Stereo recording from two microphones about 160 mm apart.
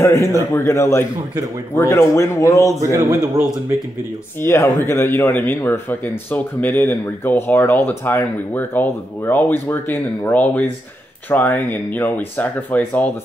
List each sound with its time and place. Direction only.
0.0 s a man's voice: 15° left (ahead or behind)
2.8 s a man's voice: 20° right (ahead or behind)
4.4 s a man's voice: 15° left (ahead or behind)